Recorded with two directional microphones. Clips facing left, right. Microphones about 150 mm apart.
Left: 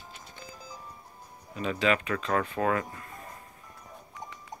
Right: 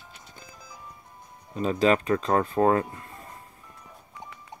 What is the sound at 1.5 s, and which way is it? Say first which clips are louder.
Speech: right 5 dB; 35° right (ahead or behind).